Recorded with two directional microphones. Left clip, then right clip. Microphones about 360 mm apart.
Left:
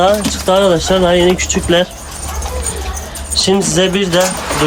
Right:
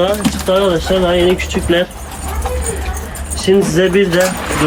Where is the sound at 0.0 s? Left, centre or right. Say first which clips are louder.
Left 3 dB; left.